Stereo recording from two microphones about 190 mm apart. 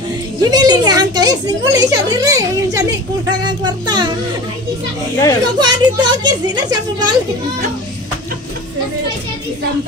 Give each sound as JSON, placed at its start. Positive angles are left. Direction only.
{"t": 0.4, "sound": "a woman's voice", "side_deg": -20}
{"t": 5.6, "sound": "a woman's voice", "side_deg": -20}